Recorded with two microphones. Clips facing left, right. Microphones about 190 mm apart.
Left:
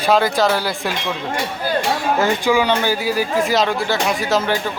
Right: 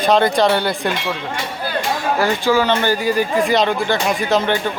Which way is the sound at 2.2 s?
15° left (ahead or behind).